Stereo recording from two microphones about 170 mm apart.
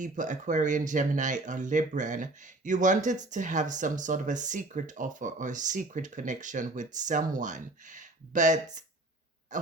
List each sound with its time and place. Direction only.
0.0 s speech: 45° right (ahead or behind)